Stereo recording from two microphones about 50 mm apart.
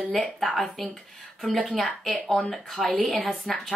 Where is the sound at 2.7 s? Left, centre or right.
Centre.